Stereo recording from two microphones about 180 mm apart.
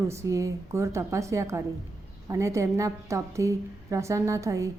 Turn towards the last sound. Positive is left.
turn(degrees=-15)  # may be behind; listen again after turning